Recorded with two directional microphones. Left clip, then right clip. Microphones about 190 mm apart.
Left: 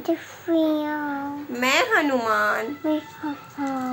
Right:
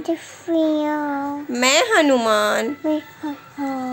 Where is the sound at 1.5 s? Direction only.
45° right (ahead or behind).